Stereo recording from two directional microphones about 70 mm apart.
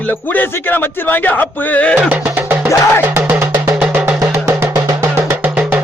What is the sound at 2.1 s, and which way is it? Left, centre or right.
Speech, right.